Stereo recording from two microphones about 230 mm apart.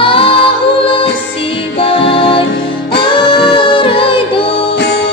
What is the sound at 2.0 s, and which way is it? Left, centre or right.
Music, left.